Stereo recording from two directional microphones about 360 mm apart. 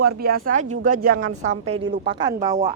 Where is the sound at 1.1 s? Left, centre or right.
Right.